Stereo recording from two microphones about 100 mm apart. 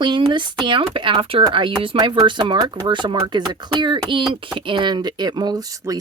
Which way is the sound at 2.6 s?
40° right (ahead or behind).